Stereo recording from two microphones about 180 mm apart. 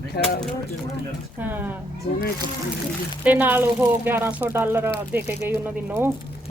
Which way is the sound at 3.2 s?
10° right (ahead or behind).